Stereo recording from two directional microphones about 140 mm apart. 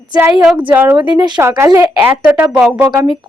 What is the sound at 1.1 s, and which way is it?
Speech, 30° right (ahead or behind).